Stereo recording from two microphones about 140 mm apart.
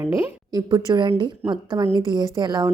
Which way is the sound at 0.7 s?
30° right (ahead or behind).